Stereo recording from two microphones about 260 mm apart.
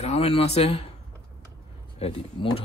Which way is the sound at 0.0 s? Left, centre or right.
Left.